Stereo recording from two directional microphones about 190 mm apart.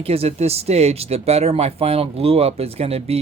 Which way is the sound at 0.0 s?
30° right (ahead or behind).